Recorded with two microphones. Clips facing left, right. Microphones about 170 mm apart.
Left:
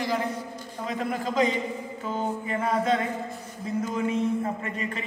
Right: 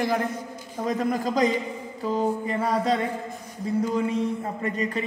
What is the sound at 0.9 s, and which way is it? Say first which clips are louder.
A man's voice: right 4 dB; 40° right (ahead or behind).